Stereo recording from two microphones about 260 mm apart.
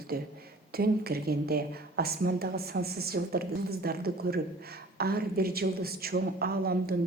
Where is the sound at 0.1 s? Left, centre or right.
Right.